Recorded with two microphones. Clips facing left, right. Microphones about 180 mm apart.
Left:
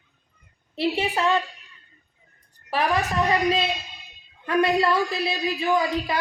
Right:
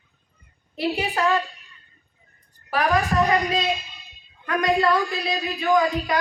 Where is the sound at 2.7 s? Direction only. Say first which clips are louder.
Right 2 dB; 30° left (ahead or behind).